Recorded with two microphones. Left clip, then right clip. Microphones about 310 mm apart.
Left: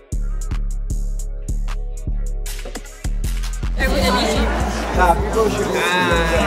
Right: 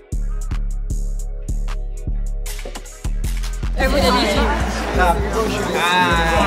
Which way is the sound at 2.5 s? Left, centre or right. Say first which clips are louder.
Even; centre.